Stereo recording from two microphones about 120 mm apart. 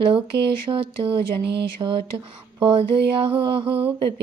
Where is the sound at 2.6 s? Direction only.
50° right (ahead or behind).